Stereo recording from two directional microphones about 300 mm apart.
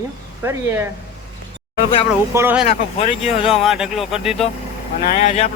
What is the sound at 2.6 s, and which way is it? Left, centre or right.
Speech, left.